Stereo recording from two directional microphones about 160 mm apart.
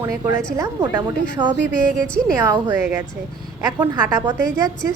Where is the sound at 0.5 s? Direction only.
25° right (ahead or behind).